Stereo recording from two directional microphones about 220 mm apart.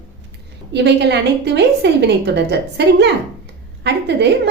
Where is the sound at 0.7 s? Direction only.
50° right (ahead or behind).